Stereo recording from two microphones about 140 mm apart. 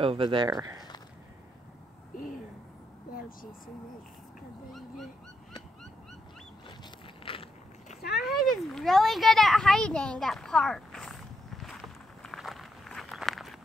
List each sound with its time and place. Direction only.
0.0 s speech: 40° right (ahead or behind)
0.5 s speech: 25° right (ahead or behind)
7.3 s biting: 40° left (ahead or behind)
8.3 s a sound: centre (ahead or behind)